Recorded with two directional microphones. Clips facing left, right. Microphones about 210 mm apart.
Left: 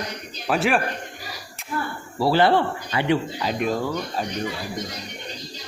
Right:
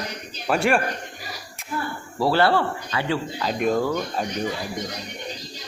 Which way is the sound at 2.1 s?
10° left (ahead or behind).